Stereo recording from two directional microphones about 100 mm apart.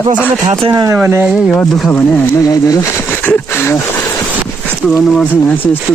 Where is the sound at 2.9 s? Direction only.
20° left (ahead or behind).